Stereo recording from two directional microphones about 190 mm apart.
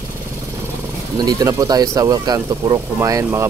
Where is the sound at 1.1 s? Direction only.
20° right (ahead or behind).